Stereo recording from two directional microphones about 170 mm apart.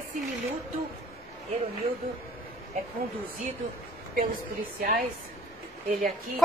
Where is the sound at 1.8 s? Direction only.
30° right (ahead or behind).